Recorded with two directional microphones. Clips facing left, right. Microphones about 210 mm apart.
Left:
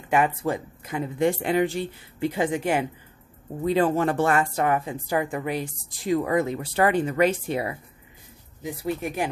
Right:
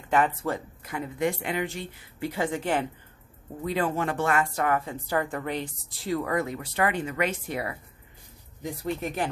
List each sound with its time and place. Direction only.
0.1 s a woman's voice: 15° left (ahead or behind); by 2.2 s 30° left (ahead or behind)
2.2 s speech: 20° left (ahead or behind)
3.6 s a woman's voice: 30° left (ahead or behind)
8.8 s speech: 10° left (ahead or behind)